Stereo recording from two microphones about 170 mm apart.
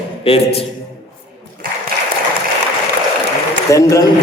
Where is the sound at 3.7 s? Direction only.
20° left (ahead or behind).